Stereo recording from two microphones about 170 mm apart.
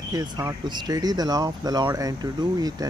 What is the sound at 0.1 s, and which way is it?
Speech, 20° right (ahead or behind).